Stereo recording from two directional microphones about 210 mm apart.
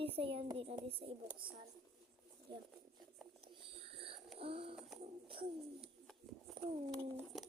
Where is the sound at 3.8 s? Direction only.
25° right (ahead or behind).